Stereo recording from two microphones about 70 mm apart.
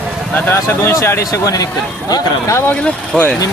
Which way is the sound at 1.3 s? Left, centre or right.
Left.